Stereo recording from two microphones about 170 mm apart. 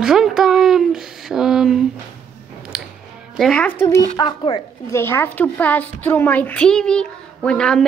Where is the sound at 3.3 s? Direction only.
5° left (ahead or behind).